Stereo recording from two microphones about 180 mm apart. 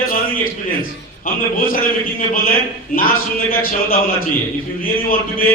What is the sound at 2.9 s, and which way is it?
A man's voice, 50° left (ahead or behind).